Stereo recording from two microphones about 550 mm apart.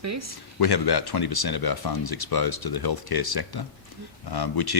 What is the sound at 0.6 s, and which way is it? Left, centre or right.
Speech, left.